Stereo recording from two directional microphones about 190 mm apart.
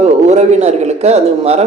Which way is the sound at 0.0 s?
35° right (ahead or behind).